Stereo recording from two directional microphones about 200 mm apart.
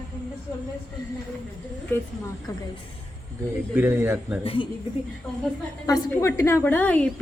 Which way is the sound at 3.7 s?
10° right (ahead or behind).